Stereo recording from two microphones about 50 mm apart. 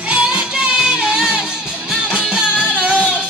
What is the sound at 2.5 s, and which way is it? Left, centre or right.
Music, left.